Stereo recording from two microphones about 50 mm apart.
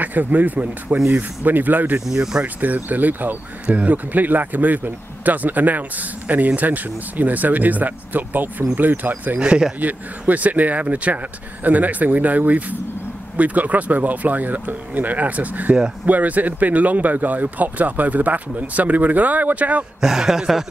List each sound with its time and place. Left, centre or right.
0.0 s speech: right
2.0 s speech: centre
2.4 s speech: right
9.4 s speech: centre
9.8 s speech: right
20.0 s speech: centre